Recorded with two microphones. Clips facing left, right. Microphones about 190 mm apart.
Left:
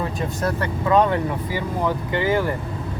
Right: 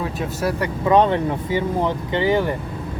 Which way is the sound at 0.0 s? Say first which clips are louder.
Right 1 dB; 5° right (ahead or behind).